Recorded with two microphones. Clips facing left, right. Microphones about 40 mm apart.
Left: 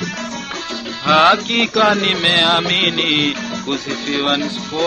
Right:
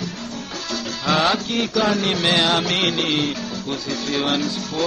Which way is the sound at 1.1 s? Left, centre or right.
Left.